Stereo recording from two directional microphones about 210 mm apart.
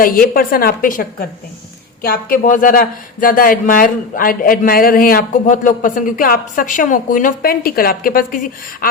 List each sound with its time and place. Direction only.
0.0 s a woman's voice: 45° left (ahead or behind)